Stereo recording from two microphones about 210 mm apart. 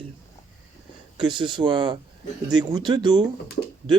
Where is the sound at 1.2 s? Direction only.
20° right (ahead or behind).